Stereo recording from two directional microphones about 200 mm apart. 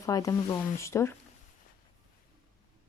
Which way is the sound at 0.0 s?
15° left (ahead or behind).